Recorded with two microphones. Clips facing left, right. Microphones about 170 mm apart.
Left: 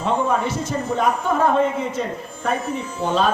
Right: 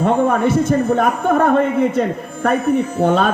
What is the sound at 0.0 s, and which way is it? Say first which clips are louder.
A man's voice: right 6 dB; 55° right (ahead or behind).